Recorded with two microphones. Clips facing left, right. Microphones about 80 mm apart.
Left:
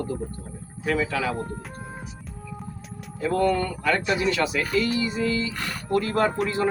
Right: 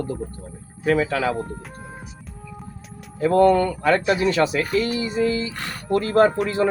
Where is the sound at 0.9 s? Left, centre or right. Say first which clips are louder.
Right 4 dB; right.